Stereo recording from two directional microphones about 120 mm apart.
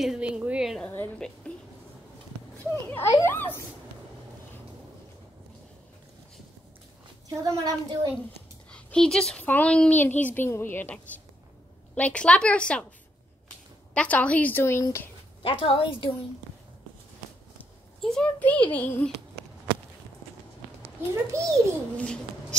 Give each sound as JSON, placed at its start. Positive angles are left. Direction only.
{"t": 0.0, "sound": "a woman's voice", "side_deg": -5}
{"t": 0.8, "sound": "a woman's voice", "side_deg": 10}
{"t": 3.1, "sound": "a child's voice", "side_deg": 30}
{"t": 3.3, "sound": "a woman's voice", "side_deg": 20}
{"t": 7.2, "sound": "speech", "side_deg": -30}
{"t": 8.6, "sound": "a woman's voice", "side_deg": 5}
{"t": 13.9, "sound": "a woman's voice", "side_deg": 10}
{"t": 15.4, "sound": "a woman's voice", "side_deg": 50}
{"t": 18.0, "sound": "a woman's voice", "side_deg": 5}
{"t": 21.1, "sound": "speech", "side_deg": -25}
{"t": 21.9, "sound": "a child's voice", "side_deg": 10}